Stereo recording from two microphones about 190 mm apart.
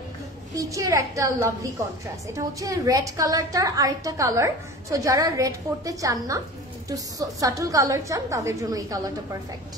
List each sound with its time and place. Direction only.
0.6 s a woman's voice: 15° right (ahead or behind)